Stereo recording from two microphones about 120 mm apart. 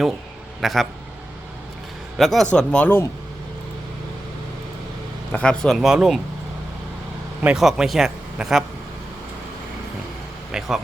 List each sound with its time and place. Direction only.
0.6 s a man's voice: centre (ahead or behind)
2.1 s speech: centre (ahead or behind); by 3.1 s 15° left (ahead or behind)
5.3 s a man's voice: 10° left (ahead or behind)
7.4 s a man's voice: 5° right (ahead or behind)
10.5 s a man's voice: 5° right (ahead or behind)